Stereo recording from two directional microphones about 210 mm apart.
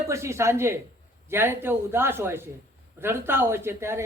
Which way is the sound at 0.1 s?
15° right (ahead or behind).